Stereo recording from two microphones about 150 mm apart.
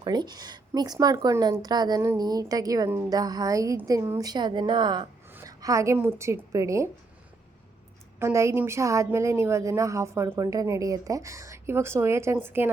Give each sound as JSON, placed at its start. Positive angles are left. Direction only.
{"t": 0.0, "sound": "a woman's voice", "side_deg": -30}
{"t": 8.2, "sound": "a woman's voice", "side_deg": -20}